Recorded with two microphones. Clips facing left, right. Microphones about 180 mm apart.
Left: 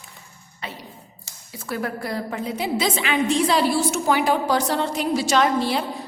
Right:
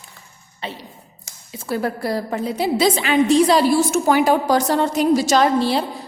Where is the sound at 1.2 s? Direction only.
25° right (ahead or behind).